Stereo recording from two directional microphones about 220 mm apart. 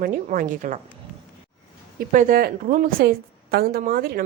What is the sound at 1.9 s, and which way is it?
A woman's voice, 40° right (ahead or behind).